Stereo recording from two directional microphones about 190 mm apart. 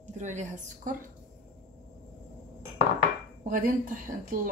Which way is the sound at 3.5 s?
45° right (ahead or behind).